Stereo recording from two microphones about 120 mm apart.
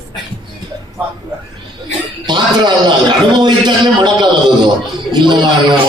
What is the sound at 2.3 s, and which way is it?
A man's voice, 40° right (ahead or behind).